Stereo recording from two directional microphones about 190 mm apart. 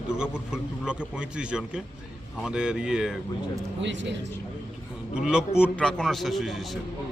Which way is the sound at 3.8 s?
70° right (ahead or behind).